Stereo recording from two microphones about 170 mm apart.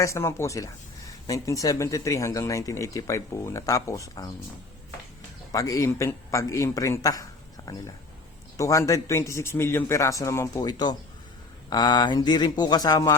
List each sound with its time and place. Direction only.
0.0 s speech: 15° left (ahead or behind)
5.5 s a man's voice: 20° left (ahead or behind)